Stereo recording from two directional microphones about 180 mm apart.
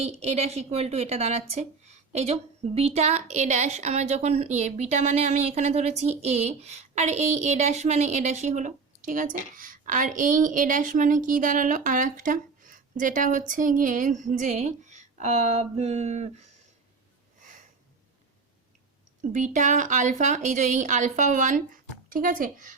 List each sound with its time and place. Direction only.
0.0 s a woman's voice: 35° right (ahead or behind)
19.3 s a woman's voice: 40° right (ahead or behind)